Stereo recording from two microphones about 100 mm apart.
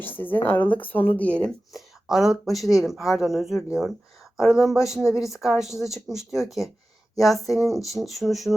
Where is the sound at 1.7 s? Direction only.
5° right (ahead or behind).